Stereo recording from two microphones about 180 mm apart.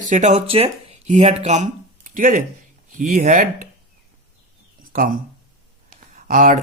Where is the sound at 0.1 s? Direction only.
45° right (ahead or behind).